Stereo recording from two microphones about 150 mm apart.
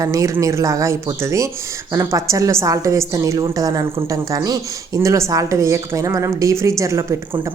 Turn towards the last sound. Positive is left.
turn(degrees=-20)  # may be behind; listen again after turning